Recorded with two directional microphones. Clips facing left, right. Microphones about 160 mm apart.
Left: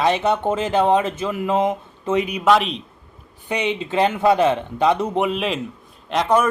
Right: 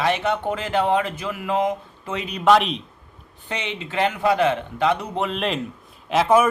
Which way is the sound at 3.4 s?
15° left (ahead or behind).